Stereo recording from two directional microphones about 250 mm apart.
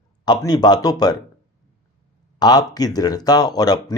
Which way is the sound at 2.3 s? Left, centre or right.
Centre.